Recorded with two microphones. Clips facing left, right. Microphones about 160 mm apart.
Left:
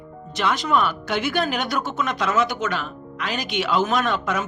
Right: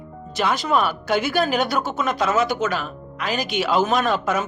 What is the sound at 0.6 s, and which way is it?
Speech, 35° right (ahead or behind).